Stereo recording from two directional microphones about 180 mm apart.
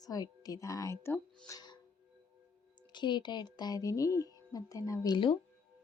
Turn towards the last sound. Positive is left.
turn(degrees=25)  # may be behind; listen again after turning